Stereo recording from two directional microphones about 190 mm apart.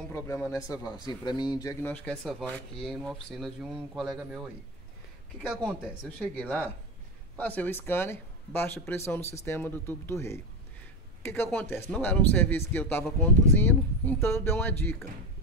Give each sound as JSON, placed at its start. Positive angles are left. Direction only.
{"t": 0.1, "sound": "speech", "side_deg": 15}